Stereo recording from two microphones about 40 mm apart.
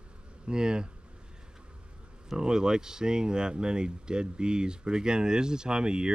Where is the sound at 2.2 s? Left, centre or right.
Centre.